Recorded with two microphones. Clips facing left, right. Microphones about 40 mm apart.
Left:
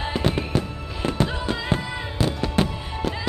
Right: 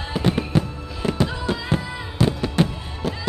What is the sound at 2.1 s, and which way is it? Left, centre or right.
Music, centre.